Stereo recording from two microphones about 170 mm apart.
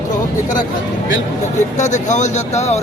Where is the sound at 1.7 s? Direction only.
45° left (ahead or behind).